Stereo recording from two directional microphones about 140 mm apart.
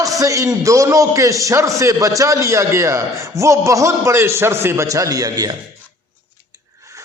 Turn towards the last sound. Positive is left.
turn(degrees=-25)  # may be behind; listen again after turning